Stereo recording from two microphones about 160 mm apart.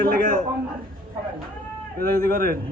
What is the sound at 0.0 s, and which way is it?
Speech, 65° right (ahead or behind).